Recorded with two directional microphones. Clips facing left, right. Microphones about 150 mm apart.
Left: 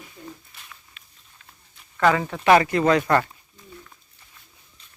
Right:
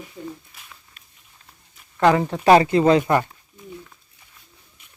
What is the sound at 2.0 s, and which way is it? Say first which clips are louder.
Speech: right 3 dB; 20° right (ahead or behind).